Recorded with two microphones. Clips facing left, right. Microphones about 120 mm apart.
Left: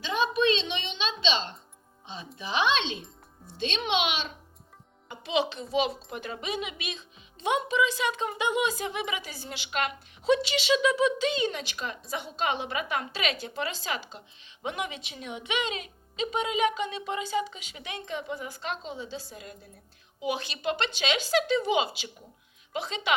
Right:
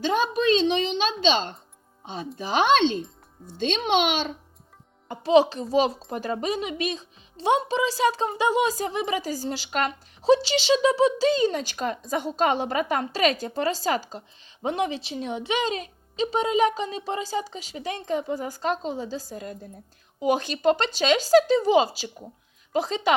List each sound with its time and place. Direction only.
0.0 s a woman's voice: 40° right (ahead or behind)